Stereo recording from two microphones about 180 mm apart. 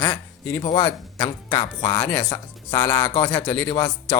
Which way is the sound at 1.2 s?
20° left (ahead or behind).